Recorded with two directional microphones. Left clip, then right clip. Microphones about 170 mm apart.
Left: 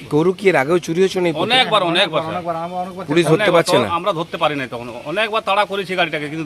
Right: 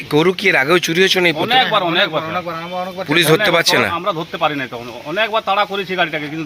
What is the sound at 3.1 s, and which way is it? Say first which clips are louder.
Speech: right 1 dB; 15° left (ahead or behind).